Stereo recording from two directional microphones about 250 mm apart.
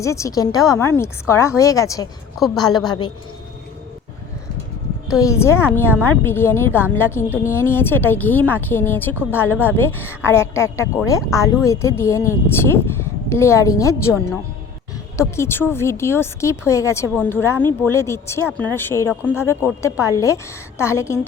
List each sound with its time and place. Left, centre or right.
0.0 s a woman's voice: centre
5.1 s a woman's voice: centre
15.2 s a woman's voice: centre